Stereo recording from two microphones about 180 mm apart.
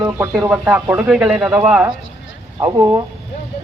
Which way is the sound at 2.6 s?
20° right (ahead or behind).